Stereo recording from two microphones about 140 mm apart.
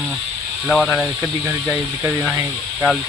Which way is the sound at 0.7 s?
5° left (ahead or behind).